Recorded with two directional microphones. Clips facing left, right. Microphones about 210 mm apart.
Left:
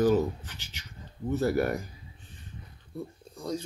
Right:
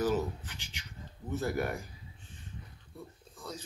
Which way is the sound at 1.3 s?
35° left (ahead or behind).